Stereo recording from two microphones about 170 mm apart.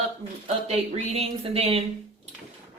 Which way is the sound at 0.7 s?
35° right (ahead or behind).